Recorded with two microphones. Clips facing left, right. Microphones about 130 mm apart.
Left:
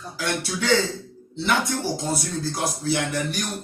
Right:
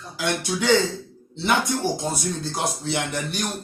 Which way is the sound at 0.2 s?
15° right (ahead or behind).